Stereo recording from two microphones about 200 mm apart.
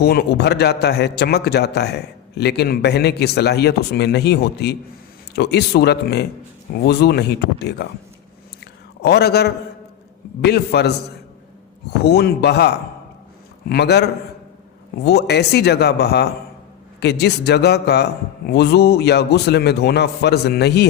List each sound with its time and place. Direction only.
0.0 s a man's voice: 50° left (ahead or behind)
8.6 s a sound: 55° left (ahead or behind)
10.4 s a man's voice: 55° left (ahead or behind)
12.0 s a man's voice: 55° left (ahead or behind)